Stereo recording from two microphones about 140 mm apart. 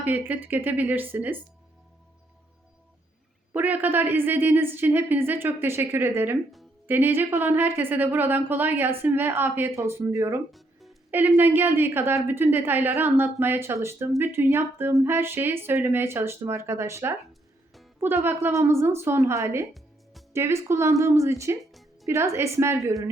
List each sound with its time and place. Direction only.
0.0 s a woman's voice: 10° right (ahead or behind)
3.5 s a woman's voice: 10° right (ahead or behind)
10.5 s music: centre (ahead or behind)
11.1 s a woman's voice: 15° right (ahead or behind)
21.6 s music: centre (ahead or behind)
22.0 s a woman's voice: 20° right (ahead or behind)